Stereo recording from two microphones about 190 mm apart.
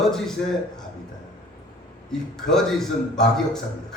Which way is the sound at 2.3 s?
Centre (ahead or behind).